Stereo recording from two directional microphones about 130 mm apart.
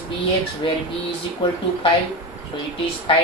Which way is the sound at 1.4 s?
40° left (ahead or behind).